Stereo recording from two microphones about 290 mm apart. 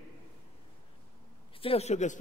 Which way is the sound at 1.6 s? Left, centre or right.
Centre.